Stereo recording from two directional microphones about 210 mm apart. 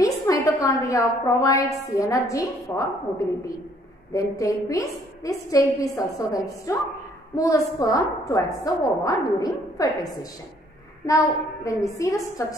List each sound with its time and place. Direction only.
0.0 s a woman's voice: 15° left (ahead or behind)
11.1 s a woman's voice: 15° left (ahead or behind)